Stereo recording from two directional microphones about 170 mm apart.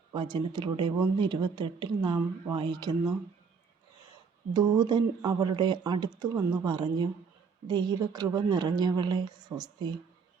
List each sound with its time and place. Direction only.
0.1 s speech: 25° right (ahead or behind)
4.5 s speech: 20° right (ahead or behind)